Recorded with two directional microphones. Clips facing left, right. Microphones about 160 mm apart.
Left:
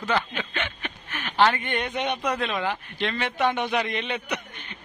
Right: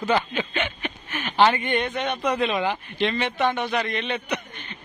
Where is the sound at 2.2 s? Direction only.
5° right (ahead or behind).